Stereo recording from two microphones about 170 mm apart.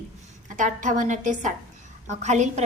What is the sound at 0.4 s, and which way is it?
A woman's voice, 50° right (ahead or behind).